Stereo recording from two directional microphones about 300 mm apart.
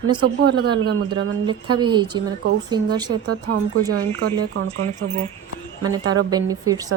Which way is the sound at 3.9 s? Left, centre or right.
Right.